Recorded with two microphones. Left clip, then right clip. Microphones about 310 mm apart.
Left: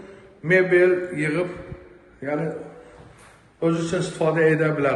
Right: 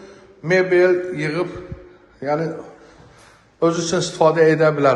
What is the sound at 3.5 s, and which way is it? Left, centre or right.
A man's voice, right.